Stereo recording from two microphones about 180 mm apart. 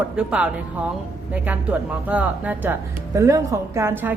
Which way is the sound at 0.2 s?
5° right (ahead or behind).